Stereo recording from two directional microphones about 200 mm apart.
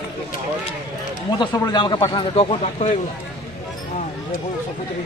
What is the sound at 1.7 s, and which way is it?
A man's voice, 20° left (ahead or behind).